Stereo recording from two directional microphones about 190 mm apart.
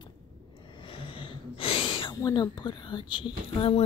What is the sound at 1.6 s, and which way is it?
Speech, 30° left (ahead or behind).